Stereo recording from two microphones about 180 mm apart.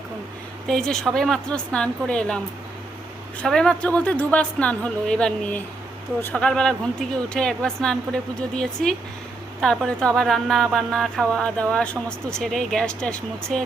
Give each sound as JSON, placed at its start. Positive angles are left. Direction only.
{"t": 0.7, "sound": "speech", "side_deg": 5}
{"t": 3.4, "sound": "speech", "side_deg": 5}